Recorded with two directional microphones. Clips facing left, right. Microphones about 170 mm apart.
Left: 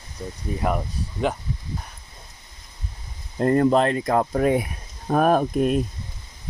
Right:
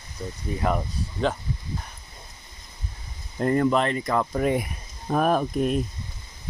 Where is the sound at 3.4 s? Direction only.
40° left (ahead or behind).